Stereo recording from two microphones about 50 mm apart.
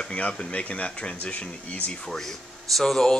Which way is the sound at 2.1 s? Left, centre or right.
Centre.